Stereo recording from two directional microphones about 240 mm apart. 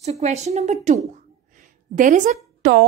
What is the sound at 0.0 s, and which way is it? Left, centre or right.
A woman's voice, right.